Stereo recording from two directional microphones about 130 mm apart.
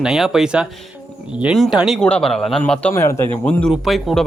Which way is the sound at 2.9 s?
20° left (ahead or behind).